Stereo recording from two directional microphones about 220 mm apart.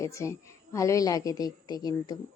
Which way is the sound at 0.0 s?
15° left (ahead or behind).